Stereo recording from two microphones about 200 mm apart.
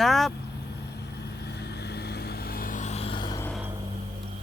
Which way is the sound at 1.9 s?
55° left (ahead or behind).